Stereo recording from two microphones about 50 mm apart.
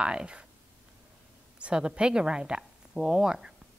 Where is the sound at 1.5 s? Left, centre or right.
Right.